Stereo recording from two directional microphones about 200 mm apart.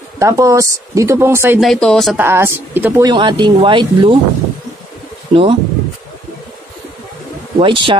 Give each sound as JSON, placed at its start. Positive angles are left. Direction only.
{"t": 0.2, "sound": "speech", "side_deg": -15}
{"t": 1.6, "sound": "speech", "side_deg": 0}
{"t": 2.1, "sound": "speech", "side_deg": -10}
{"t": 3.1, "sound": "speech", "side_deg": -20}
{"t": 5.3, "sound": "speech", "side_deg": -25}
{"t": 7.5, "sound": "speech", "side_deg": -25}